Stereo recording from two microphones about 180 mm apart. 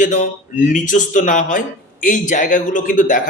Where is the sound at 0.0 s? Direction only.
45° left (ahead or behind).